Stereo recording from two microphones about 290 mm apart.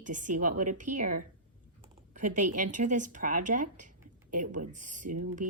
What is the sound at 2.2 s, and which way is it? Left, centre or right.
Speech, right.